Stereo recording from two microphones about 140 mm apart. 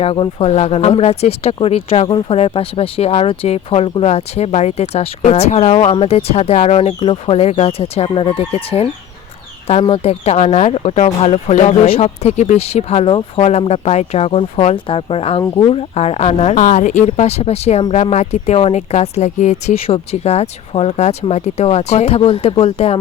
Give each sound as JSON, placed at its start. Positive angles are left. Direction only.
{"t": 0.0, "sound": "speech", "side_deg": 40}
{"t": 17.1, "sound": "speech", "side_deg": 50}